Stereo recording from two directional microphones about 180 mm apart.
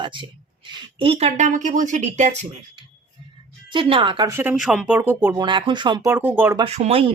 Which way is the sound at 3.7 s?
30° right (ahead or behind).